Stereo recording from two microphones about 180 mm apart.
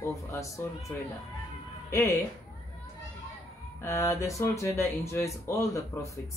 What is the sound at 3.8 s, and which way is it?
Speech, 15° left (ahead or behind).